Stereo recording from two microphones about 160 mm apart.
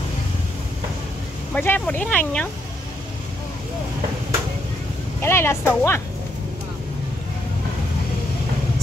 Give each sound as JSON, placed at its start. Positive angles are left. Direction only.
{"t": 1.5, "sound": "speech", "side_deg": 10}
{"t": 5.2, "sound": "speech", "side_deg": 15}